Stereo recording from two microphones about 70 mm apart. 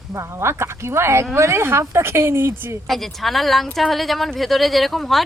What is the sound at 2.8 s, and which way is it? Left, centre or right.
A woman's voice, centre.